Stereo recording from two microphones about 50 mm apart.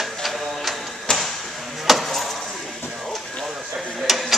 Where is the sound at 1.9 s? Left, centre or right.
Centre.